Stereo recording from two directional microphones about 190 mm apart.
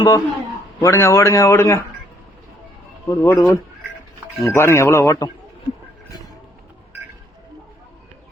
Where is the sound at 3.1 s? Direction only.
15° left (ahead or behind).